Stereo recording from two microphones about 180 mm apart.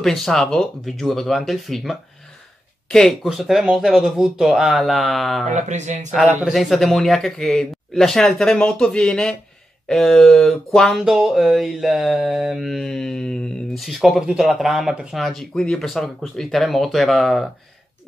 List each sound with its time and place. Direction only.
0.0 s speech: centre (ahead or behind)
5.5 s speech: 40° right (ahead or behind)
6.1 s speech: 5° right (ahead or behind)